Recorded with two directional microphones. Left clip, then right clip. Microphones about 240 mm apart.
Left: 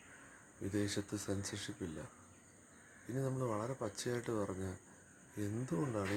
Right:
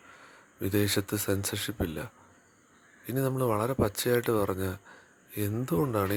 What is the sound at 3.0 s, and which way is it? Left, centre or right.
Speech, right.